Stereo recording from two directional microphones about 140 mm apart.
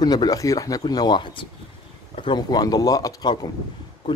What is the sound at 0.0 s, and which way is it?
Speech, 30° left (ahead or behind).